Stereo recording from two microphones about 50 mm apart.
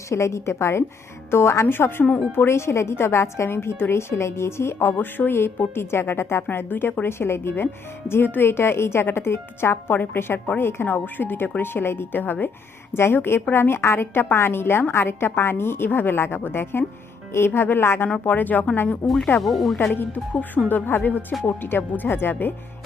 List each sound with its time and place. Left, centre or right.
0.1 s a woman's voice: left
1.6 s a woman's voice: left
6.5 s a woman's voice: left
7.1 s a woman's voice: left
10.8 s a woman's voice: left
12.9 s a woman's voice: left
18.3 s a woman's voice: left
19.4 s speech: centre
19.9 s a woman's voice: left